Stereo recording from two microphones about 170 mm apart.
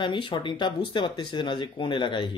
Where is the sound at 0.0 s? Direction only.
30° left (ahead or behind).